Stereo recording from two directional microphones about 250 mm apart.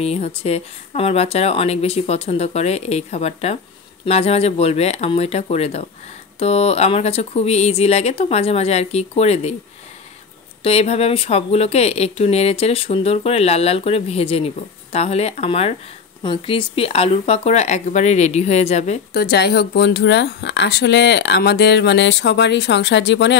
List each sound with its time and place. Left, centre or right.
0.0 s speech: left
10.6 s speech: left
19.3 s speech: left